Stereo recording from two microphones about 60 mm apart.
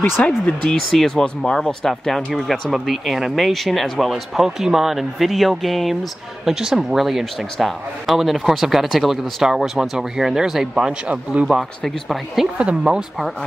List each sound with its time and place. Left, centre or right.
0.2 s speech: centre
0.7 s speech: centre
6.4 s speech: centre
11.8 s speech: centre
12.5 s speech: centre